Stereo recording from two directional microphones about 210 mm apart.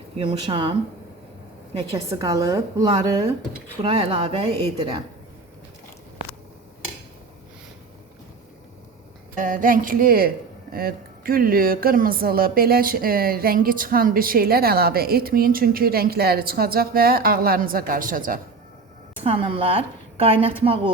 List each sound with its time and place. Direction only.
0.2 s a woman's voice: 25° right (ahead or behind)
2.0 s a woman's voice: 15° right (ahead or behind)
9.3 s a woman's voice: 40° right (ahead or behind)
19.2 s a woman's voice: 25° right (ahead or behind)